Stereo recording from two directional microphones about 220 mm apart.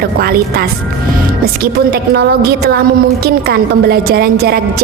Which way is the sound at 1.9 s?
50° right (ahead or behind).